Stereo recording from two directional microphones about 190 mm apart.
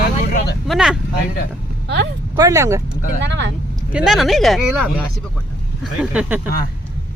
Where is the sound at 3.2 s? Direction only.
70° right (ahead or behind).